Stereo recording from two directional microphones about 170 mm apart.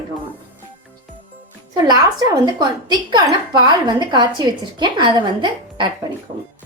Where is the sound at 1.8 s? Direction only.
25° right (ahead or behind).